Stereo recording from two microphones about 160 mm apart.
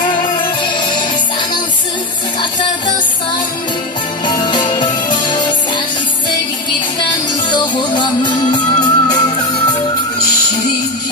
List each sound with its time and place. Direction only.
4.3 s music: 30° left (ahead or behind)
7.4 s music: 30° left (ahead or behind)